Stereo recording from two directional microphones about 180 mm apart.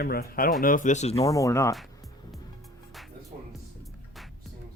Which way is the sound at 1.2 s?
20° left (ahead or behind).